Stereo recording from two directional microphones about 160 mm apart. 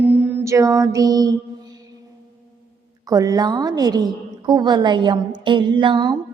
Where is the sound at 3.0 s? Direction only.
25° right (ahead or behind).